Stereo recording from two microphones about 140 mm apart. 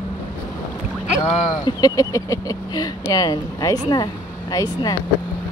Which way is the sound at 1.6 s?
25° left (ahead or behind).